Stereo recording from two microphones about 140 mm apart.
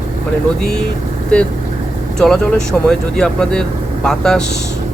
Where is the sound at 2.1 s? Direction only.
5° left (ahead or behind).